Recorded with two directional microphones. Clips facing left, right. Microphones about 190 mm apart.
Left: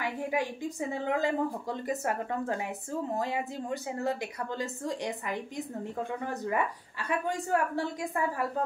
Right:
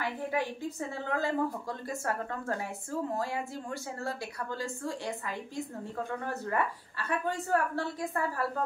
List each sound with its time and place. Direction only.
0.0 s a woman's voice: 15° left (ahead or behind)